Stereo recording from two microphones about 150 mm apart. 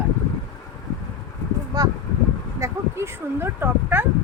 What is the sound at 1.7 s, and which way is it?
Speech, 25° right (ahead or behind).